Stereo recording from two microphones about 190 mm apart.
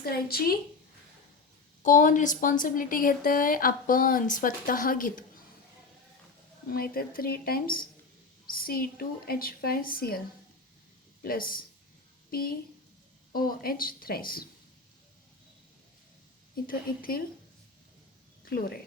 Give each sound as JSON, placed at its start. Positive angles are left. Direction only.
{"t": 0.0, "sound": "speech", "side_deg": 50}
{"t": 1.8, "sound": "speech", "side_deg": 40}
{"t": 6.7, "sound": "speech", "side_deg": 50}
{"t": 11.2, "sound": "speech", "side_deg": 50}
{"t": 16.6, "sound": "speech", "side_deg": 50}
{"t": 18.4, "sound": "speech", "side_deg": 50}